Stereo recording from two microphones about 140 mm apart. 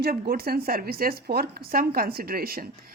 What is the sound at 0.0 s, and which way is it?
A woman's voice, 90° right.